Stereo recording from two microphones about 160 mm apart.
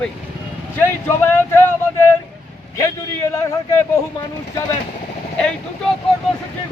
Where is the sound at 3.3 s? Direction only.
20° left (ahead or behind).